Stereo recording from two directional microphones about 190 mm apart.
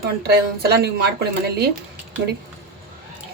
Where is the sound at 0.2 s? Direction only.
55° right (ahead or behind).